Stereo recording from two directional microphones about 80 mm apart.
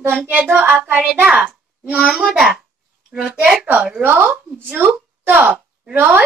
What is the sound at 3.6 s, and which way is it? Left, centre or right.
A woman's voice, right.